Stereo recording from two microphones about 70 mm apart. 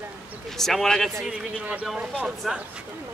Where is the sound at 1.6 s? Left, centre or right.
Right.